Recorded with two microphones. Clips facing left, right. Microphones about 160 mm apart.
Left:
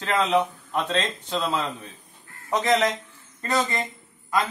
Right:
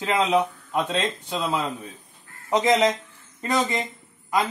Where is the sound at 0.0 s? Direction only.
10° right (ahead or behind).